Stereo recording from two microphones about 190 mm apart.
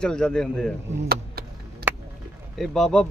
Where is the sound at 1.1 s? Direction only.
55° right (ahead or behind).